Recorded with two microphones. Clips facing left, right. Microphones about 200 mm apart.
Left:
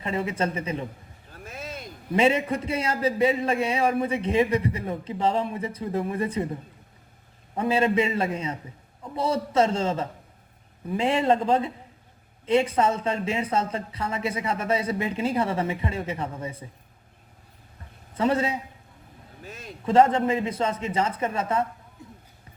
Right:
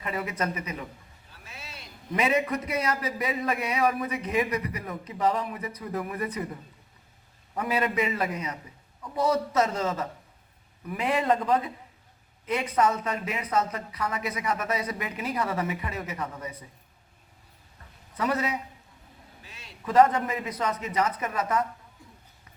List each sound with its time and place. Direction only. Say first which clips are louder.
0.0 s a man's voice: left 4 dB; 25° left (ahead or behind)
1.3 s a sound: left 9 dB; 50° left (ahead or behind)
2.1 s a man's voice: left 4 dB; 30° left (ahead or behind)
7.5 s a man's voice: left 5 dB; 25° left (ahead or behind)
18.2 s a man's voice: left 4 dB; 25° left (ahead or behind)
19.4 s a sound: left 13 dB; 45° left (ahead or behind)
19.8 s a man's voice: left 2 dB; 25° left (ahead or behind)